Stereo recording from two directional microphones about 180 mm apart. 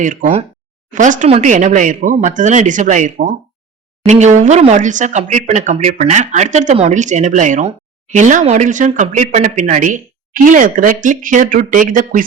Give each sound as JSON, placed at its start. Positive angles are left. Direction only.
{"t": 0.0, "sound": "speech", "side_deg": -45}